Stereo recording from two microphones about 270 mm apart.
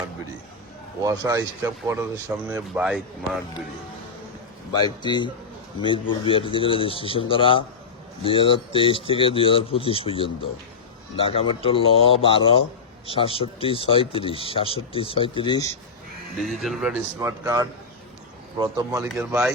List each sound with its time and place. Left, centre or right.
1.0 s speech: centre
4.7 s a man's voice: centre
16.4 s speech: centre